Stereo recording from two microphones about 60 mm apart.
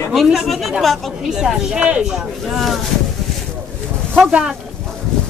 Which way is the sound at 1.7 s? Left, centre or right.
Right.